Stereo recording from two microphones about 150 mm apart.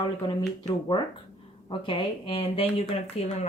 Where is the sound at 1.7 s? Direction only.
35° left (ahead or behind).